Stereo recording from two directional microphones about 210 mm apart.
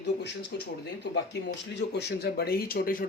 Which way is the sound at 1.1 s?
55° left (ahead or behind).